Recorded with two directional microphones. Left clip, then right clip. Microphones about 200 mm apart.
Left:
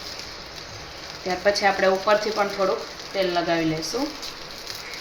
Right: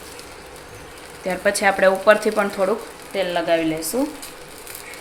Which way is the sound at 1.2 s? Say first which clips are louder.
Right 2 dB; 55° right (ahead or behind).